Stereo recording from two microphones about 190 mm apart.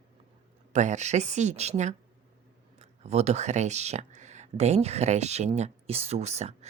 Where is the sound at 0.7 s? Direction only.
40° right (ahead or behind).